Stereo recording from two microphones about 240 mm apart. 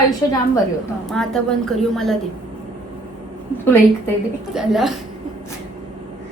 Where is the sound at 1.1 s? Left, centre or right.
Centre.